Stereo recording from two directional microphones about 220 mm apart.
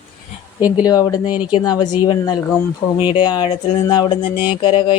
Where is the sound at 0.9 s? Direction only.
15° left (ahead or behind).